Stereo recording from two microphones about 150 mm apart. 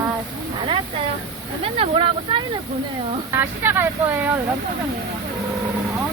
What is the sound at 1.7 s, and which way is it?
Speech, 35° right (ahead or behind).